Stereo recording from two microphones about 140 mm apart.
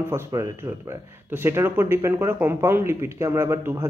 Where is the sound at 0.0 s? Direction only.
20° right (ahead or behind).